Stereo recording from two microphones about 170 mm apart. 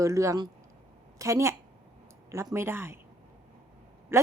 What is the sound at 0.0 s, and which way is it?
Speech, 20° right (ahead or behind).